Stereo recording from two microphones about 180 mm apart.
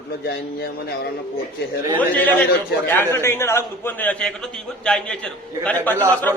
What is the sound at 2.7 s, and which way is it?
Speech, 65° left (ahead or behind).